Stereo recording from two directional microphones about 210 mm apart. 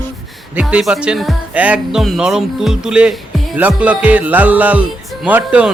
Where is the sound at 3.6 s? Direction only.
5° right (ahead or behind).